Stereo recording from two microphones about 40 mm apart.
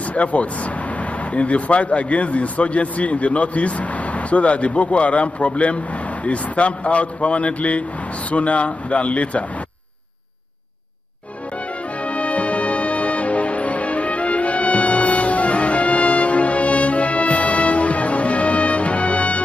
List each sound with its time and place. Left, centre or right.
0.0 s speech: left
12.0 s music: left